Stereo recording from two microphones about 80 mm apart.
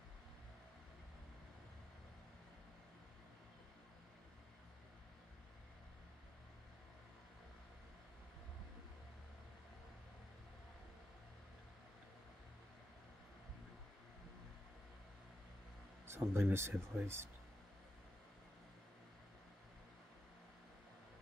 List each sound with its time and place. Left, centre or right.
16.1 s speech: right